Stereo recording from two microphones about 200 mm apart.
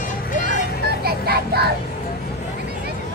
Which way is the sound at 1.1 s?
50° right (ahead or behind).